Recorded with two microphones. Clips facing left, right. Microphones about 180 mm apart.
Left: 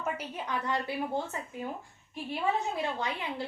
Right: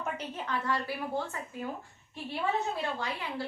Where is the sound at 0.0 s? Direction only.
10° left (ahead or behind).